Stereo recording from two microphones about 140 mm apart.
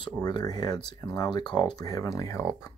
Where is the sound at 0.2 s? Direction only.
30° left (ahead or behind).